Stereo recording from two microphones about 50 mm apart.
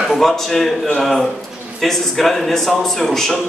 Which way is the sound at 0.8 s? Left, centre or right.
Centre.